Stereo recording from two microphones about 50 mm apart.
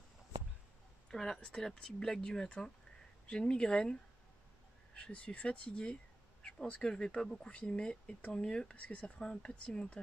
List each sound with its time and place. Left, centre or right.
1.1 s speech: centre